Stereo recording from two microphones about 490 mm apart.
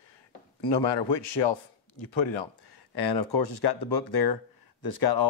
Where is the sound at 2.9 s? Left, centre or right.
Left.